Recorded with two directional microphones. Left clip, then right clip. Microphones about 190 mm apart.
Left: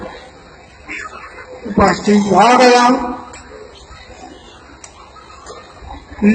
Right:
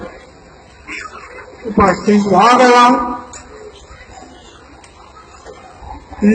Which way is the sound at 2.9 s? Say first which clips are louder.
Right 2 dB; 35° left (ahead or behind).